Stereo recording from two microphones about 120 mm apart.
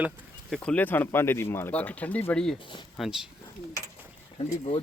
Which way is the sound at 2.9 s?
5° right (ahead or behind).